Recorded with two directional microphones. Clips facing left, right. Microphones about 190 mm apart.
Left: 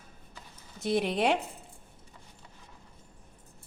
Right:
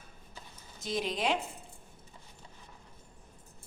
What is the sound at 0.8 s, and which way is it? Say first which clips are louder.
Speech: left 6 dB; 65° left (ahead or behind).